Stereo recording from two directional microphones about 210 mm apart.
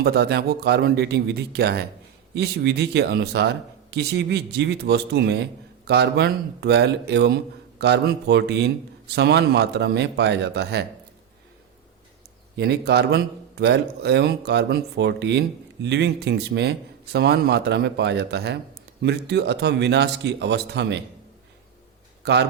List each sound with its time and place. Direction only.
0.0 s a man's voice: 50° right (ahead or behind)
12.5 s a man's voice: 50° right (ahead or behind)
22.2 s speech: 55° right (ahead or behind)